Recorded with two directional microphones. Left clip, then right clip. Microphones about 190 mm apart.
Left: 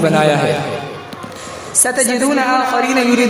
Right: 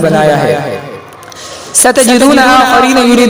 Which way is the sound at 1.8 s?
50° right (ahead or behind).